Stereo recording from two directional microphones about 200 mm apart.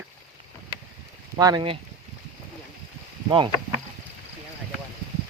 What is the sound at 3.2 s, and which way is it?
Speech, 25° right (ahead or behind).